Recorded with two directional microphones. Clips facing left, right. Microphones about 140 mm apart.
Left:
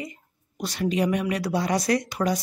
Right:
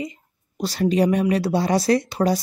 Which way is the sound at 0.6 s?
35° right (ahead or behind).